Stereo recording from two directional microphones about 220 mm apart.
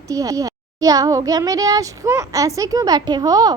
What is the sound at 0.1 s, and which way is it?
A child's voice, 15° right (ahead or behind).